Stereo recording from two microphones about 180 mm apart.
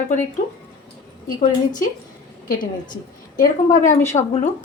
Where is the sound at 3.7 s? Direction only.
45° left (ahead or behind).